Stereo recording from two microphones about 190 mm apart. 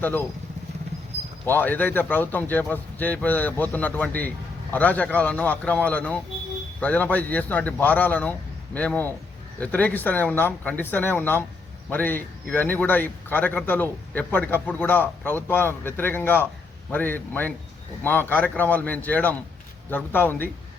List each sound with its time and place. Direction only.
0.0 s speech: 10° left (ahead or behind)
1.5 s speech: 10° left (ahead or behind)